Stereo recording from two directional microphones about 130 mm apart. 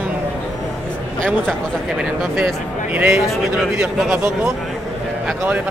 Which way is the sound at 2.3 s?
10° right (ahead or behind).